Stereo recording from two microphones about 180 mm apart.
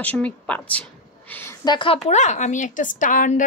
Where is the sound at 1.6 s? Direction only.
30° left (ahead or behind); by 3.4 s 45° left (ahead or behind).